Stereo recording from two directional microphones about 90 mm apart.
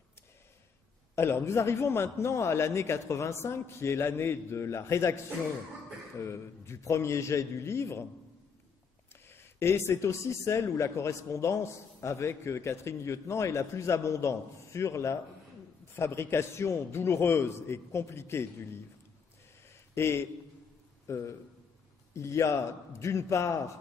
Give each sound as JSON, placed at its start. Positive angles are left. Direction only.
{"t": 1.1, "sound": "speech", "side_deg": 30}
{"t": 9.1, "sound": "a man's voice", "side_deg": 25}
{"t": 19.9, "sound": "speech", "side_deg": 30}